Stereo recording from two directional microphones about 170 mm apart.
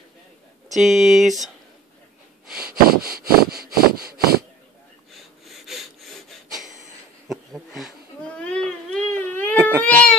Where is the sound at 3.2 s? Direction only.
60° right (ahead or behind).